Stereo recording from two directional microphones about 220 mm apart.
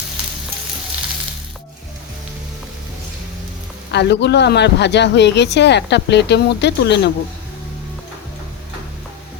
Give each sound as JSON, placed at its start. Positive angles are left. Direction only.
{"t": 3.9, "sound": "speech", "side_deg": 50}